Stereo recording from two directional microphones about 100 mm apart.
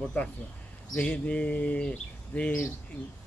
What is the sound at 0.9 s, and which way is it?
Bird, 10° left (ahead or behind).